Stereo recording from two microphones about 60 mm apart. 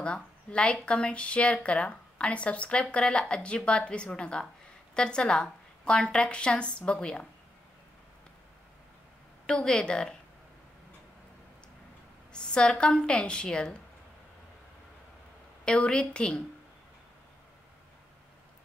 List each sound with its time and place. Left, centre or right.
0.0 s speech: centre
9.5 s speech: centre
12.3 s speech: centre
15.6 s speech: centre